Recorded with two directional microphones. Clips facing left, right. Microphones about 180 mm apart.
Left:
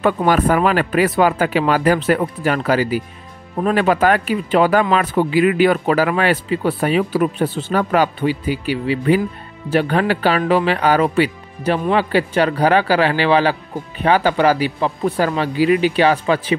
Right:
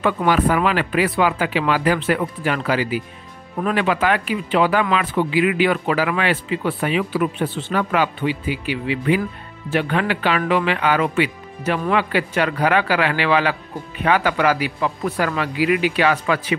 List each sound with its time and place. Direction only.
0.0 s a man's voice: 45° left (ahead or behind); by 16.5 s 30° left (ahead or behind)